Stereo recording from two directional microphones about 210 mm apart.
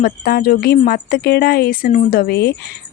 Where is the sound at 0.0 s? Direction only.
45° left (ahead or behind).